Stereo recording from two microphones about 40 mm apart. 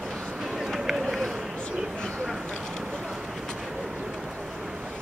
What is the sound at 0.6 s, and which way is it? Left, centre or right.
Run, centre.